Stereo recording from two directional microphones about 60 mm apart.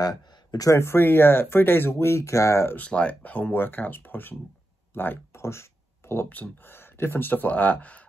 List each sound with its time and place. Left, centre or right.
0.0 s a sound: left
0.7 s speech: left
2.9 s speech: left
5.3 s a sound: left
6.2 s speech: left
6.7 s speech: left